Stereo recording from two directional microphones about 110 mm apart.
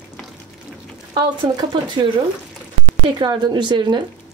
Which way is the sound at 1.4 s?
45° right (ahead or behind).